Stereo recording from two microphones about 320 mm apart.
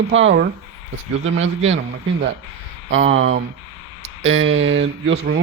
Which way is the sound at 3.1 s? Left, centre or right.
Right.